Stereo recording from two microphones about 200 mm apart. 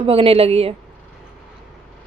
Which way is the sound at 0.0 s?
30° right (ahead or behind).